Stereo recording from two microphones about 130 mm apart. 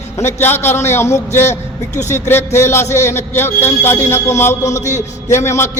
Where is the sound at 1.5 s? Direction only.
65° left (ahead or behind).